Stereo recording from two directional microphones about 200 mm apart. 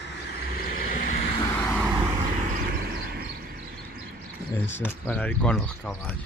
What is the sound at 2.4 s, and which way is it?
Vehicle, 45° right (ahead or behind).